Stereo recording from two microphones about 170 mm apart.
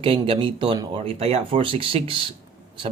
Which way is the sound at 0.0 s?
30° right (ahead or behind).